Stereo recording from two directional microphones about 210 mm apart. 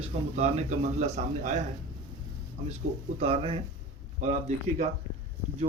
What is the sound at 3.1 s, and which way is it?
Speech, 25° right (ahead or behind).